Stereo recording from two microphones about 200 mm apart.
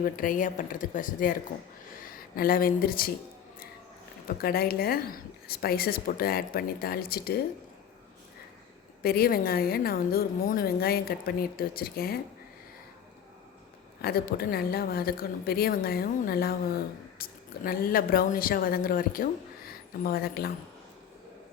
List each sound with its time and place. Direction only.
0.0 s speech: 45° left (ahead or behind)
4.3 s a woman's voice: 50° left (ahead or behind)
9.0 s a woman's voice: 50° left (ahead or behind)
14.0 s a woman's voice: 50° left (ahead or behind)